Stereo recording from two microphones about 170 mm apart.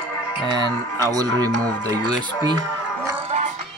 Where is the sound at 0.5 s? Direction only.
25° right (ahead or behind).